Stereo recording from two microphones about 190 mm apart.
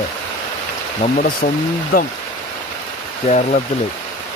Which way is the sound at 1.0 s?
45° left (ahead or behind).